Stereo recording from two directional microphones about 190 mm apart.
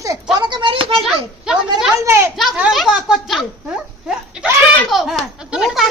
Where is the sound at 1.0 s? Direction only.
5° right (ahead or behind).